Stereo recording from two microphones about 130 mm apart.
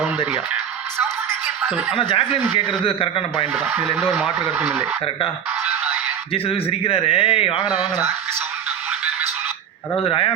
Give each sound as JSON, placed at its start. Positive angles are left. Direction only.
{"t": 2.0, "sound": "speech", "side_deg": 40}
{"t": 3.4, "sound": "speech", "side_deg": 5}
{"t": 6.3, "sound": "speech", "side_deg": 50}
{"t": 10.0, "sound": "speech", "side_deg": 45}